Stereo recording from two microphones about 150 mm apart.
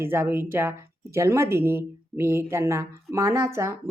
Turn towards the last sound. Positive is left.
turn(degrees=-20)  # may be behind; listen again after turning